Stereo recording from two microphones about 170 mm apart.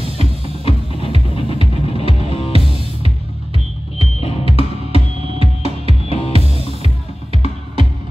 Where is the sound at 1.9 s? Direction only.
35° left (ahead or behind).